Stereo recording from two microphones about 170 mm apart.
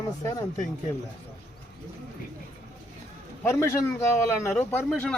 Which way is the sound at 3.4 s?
15° left (ahead or behind).